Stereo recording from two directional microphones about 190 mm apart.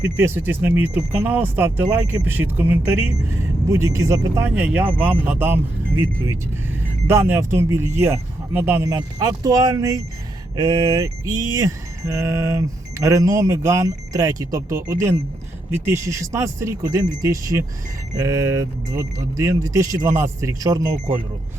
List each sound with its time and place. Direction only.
0.0 s speech: 10° right (ahead or behind)
7.1 s speech: 10° right (ahead or behind)